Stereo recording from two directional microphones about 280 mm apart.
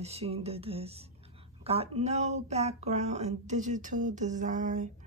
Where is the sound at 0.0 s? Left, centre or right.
Right.